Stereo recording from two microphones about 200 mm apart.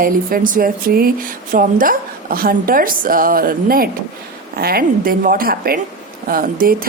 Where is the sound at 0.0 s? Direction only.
45° right (ahead or behind).